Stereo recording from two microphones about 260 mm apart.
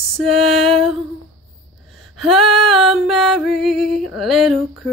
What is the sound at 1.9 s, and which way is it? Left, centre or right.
Gasp, centre.